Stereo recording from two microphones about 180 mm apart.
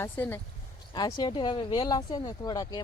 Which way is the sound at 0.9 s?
25° left (ahead or behind).